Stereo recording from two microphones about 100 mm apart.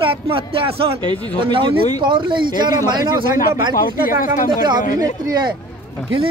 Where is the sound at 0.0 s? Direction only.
65° right (ahead or behind).